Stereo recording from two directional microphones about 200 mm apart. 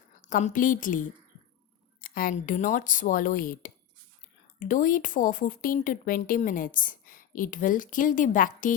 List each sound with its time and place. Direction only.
0.2 s a woman's voice: 40° left (ahead or behind)